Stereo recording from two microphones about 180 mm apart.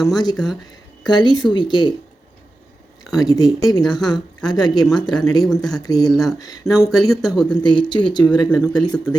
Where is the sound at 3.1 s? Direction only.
20° left (ahead or behind).